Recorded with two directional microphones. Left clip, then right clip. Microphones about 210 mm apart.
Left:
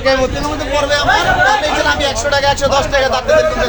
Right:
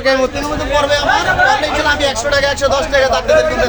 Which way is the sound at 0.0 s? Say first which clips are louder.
Even; 15° right (ahead or behind).